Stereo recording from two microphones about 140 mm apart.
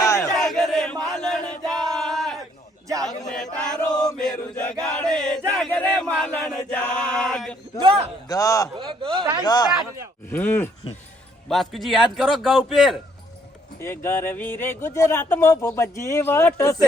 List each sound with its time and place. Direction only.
0.0 s chant: 20° left (ahead or behind)
0.3 s chant: 5° left (ahead or behind)
7.8 s speech: 40° right (ahead or behind)
8.3 s a man's voice: 25° left (ahead or behind)
8.7 s speech: 35° right (ahead or behind)
9.4 s a man's voice: 30° left (ahead or behind)
10.2 s speech: 15° left (ahead or behind)
11.4 s a man's voice: centre (ahead or behind)
13.8 s speech: 15° left (ahead or behind)